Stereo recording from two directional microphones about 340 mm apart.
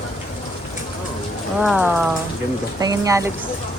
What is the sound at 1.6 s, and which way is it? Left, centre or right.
Speech, centre.